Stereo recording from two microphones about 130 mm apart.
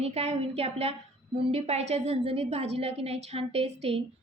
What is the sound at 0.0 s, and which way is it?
A woman's voice, 55° right (ahead or behind).